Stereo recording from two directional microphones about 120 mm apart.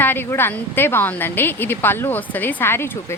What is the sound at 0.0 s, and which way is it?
Speech, 15° left (ahead or behind).